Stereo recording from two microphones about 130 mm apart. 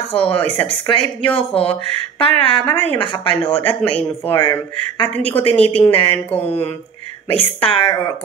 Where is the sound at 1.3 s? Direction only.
45° left (ahead or behind).